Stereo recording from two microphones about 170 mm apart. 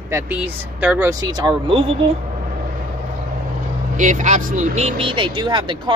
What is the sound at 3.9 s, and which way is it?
Speech, 45° right (ahead or behind).